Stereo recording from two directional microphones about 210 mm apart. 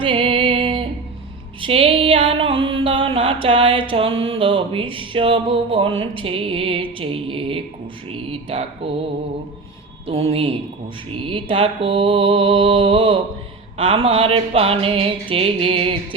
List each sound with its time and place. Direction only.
0.0 s music: 25° right (ahead or behind)
1.6 s a sound: 25° right (ahead or behind)
3.4 s speech: 25° right (ahead or behind)
10.1 s speech: 25° right (ahead or behind)